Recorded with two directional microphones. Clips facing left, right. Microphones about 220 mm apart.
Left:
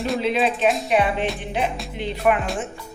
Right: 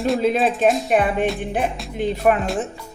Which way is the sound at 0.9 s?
50° right (ahead or behind).